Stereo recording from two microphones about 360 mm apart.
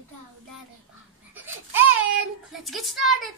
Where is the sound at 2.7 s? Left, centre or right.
Centre.